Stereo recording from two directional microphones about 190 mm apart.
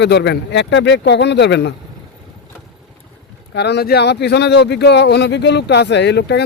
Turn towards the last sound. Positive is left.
turn(degrees=65)  # may be behind; listen again after turning